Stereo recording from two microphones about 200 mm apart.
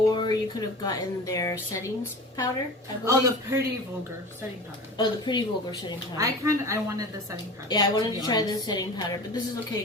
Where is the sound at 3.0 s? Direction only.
15° right (ahead or behind).